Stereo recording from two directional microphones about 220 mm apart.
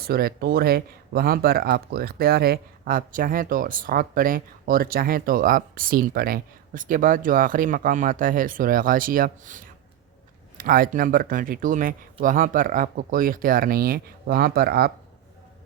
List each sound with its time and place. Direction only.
0.0 s speech: 45° right (ahead or behind)